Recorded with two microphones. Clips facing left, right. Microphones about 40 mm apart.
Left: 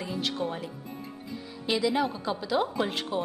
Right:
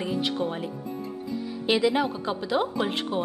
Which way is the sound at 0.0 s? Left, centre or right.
Centre.